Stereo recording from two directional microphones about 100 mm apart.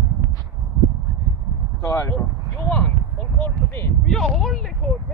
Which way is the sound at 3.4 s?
25° left (ahead or behind).